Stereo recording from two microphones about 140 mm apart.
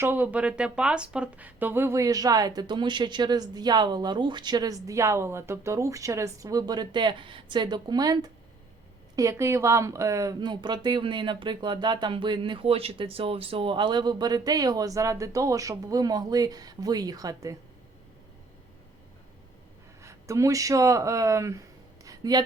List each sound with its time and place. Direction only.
0.0 s speech: 15° right (ahead or behind)
20.0 s speech: 20° right (ahead or behind)
22.0 s a sound: 25° right (ahead or behind)